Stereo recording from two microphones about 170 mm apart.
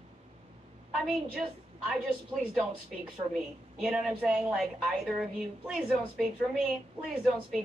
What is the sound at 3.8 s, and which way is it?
A woman's voice, 5° right (ahead or behind).